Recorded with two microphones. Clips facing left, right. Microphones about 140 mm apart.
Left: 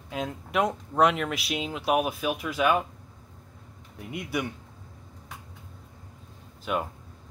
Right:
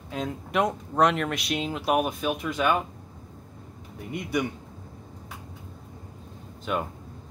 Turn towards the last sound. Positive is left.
turn(degrees=5)  # may be behind; listen again after turning